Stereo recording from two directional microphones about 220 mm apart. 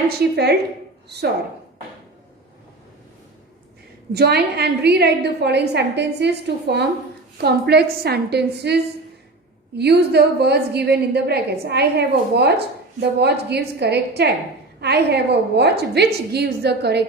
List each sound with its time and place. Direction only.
4.1 s a woman's voice: 45° right (ahead or behind)